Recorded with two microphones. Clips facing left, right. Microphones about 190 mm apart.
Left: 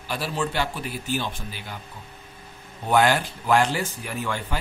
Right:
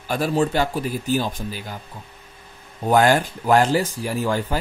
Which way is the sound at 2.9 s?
45° right (ahead or behind).